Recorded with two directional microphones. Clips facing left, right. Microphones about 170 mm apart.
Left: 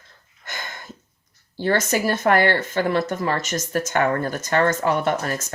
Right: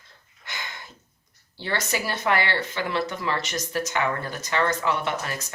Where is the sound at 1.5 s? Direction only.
45° left (ahead or behind).